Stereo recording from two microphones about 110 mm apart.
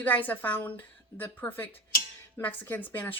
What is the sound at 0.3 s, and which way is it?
A woman's voice, 15° left (ahead or behind).